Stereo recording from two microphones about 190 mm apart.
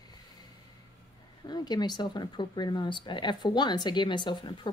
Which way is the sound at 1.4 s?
20° left (ahead or behind).